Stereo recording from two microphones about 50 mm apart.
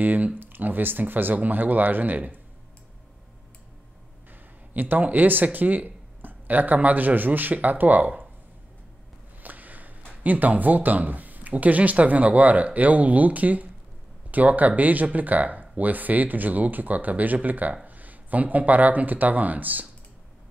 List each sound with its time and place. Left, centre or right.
0.0 s speech: right
4.3 s speech: right
9.4 s a sound: right
10.2 s speech: right